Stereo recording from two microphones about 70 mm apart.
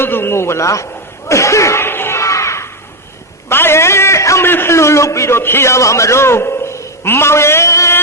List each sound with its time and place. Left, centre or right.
0.0 s a man's voice: left
1.3 s a sound: left
4.4 s a man's voice: left